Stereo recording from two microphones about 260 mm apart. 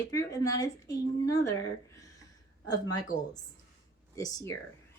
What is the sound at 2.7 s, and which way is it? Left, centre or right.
Speech, centre.